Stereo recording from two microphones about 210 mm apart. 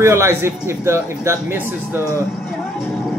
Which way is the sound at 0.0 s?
15° right (ahead or behind).